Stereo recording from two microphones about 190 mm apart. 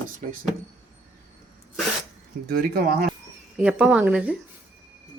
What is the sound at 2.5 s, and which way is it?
Speech, 55° right (ahead or behind).